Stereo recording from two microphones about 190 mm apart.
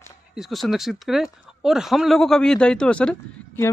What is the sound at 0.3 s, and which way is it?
Speech, centre (ahead or behind).